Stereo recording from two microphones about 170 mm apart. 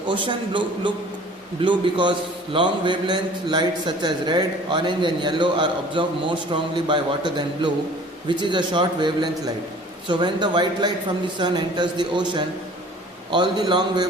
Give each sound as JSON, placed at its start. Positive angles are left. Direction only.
{"t": 0.0, "sound": "a man's voice", "side_deg": -30}